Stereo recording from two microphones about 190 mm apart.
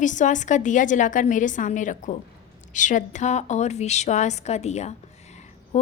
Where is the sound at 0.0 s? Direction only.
40° left (ahead or behind).